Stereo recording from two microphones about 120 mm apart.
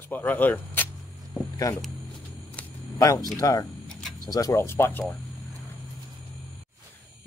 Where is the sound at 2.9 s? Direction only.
30° left (ahead or behind).